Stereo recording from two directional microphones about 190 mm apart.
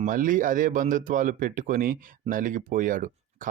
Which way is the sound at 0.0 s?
45° right (ahead or behind).